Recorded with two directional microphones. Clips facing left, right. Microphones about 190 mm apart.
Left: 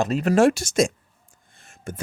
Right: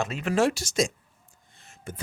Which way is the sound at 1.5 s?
50° left (ahead or behind).